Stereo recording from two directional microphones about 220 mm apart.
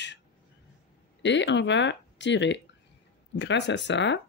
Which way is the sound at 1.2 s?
55° left (ahead or behind).